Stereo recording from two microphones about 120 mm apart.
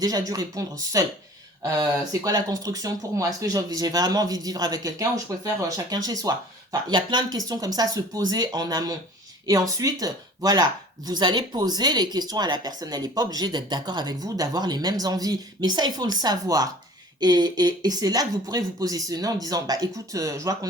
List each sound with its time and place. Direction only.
0.0 s speech: 30° right (ahead or behind)